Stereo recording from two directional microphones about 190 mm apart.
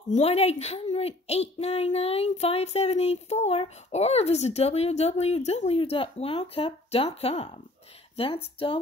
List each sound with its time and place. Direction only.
0.1 s a woman's voice: 35° left (ahead or behind)